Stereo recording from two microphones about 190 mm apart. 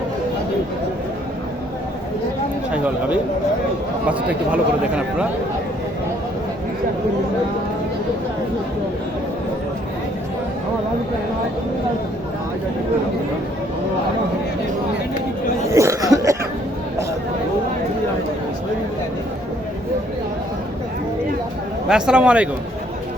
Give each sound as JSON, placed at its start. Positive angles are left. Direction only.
{"t": 2.7, "sound": "speech", "side_deg": -5}
{"t": 15.7, "sound": "chuckle", "side_deg": -15}
{"t": 21.8, "sound": "speech", "side_deg": -5}